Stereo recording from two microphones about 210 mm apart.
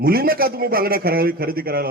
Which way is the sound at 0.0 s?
45° right (ahead or behind).